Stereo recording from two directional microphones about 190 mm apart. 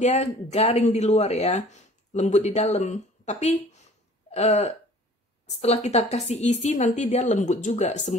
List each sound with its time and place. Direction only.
0.0 s speech: 35° left (ahead or behind)